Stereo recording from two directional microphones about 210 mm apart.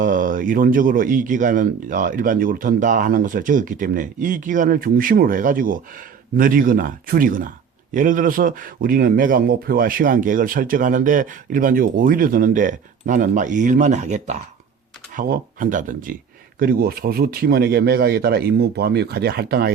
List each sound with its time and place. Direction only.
0.0 s a man's voice: 40° right (ahead or behind)